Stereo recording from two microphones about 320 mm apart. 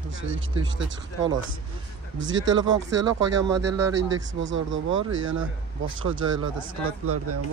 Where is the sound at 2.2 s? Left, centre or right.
Right.